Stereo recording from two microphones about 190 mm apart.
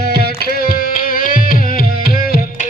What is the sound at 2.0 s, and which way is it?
Tabla, 50° left (ahead or behind).